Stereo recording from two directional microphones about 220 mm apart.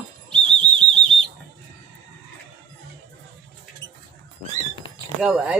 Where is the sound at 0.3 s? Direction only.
5° left (ahead or behind).